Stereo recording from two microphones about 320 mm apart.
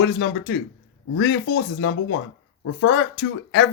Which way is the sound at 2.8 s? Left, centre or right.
Left.